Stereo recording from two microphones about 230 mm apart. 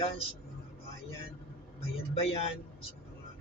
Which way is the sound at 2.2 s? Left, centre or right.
Left.